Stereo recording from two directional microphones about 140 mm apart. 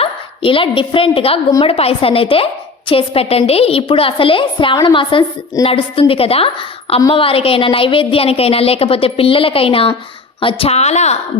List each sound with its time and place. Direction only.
0.0 s a woman's voice: 40° left (ahead or behind)